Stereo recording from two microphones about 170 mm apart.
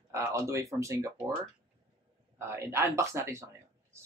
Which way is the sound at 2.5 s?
15° right (ahead or behind).